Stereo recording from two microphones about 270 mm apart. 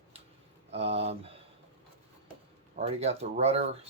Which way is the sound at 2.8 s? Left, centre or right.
Right.